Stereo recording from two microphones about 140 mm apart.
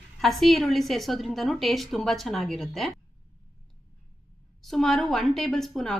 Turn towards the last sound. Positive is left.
turn(degrees=0)  # may be behind; listen again after turning